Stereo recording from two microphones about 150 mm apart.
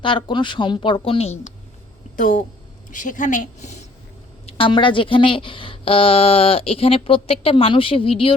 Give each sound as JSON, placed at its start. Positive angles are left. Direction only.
{"t": 0.0, "sound": "a woman's voice", "side_deg": 35}
{"t": 2.1, "sound": "speech", "side_deg": 65}
{"t": 4.4, "sound": "a woman's voice", "side_deg": 35}